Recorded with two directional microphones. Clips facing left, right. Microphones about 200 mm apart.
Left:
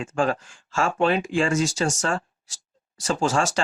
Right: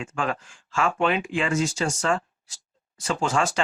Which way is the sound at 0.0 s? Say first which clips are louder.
Left 5 dB; 35° left (ahead or behind).